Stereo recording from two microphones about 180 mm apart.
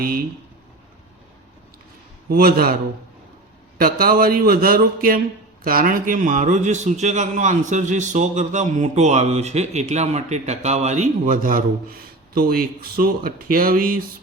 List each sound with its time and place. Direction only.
2.3 s a man's voice: 55° right (ahead or behind)
3.8 s a man's voice: 55° right (ahead or behind)